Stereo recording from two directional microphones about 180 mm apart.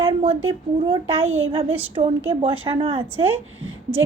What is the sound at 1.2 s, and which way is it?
Speech, 90° right.